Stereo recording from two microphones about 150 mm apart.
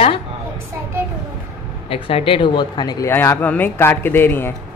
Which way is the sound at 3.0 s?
15° left (ahead or behind).